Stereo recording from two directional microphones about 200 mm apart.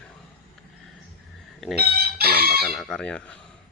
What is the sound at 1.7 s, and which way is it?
Chicken, 50° right (ahead or behind).